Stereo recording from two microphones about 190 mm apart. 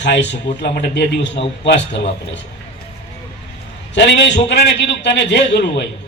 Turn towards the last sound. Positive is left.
turn(degrees=65)  # may be behind; listen again after turning